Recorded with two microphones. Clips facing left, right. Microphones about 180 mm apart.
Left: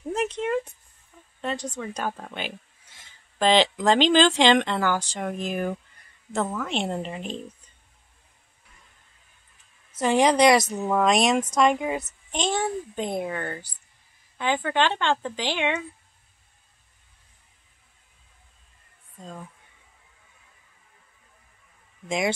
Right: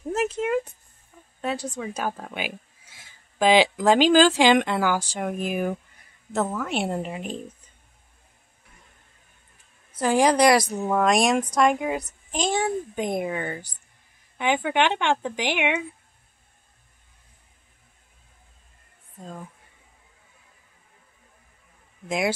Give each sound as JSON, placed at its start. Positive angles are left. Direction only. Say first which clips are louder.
{"t": 0.1, "sound": "a sound", "louder": "right 2 dB", "side_deg": -5}
{"t": 1.4, "sound": "speech", "louder": "right 2 dB", "side_deg": -10}
{"t": 10.0, "sound": "a child's voice", "louder": "even", "side_deg": -5}
{"t": 19.1, "sound": "speech", "louder": "right 1 dB", "side_deg": -5}
{"t": 22.0, "sound": "speech", "louder": "right 1 dB", "side_deg": -5}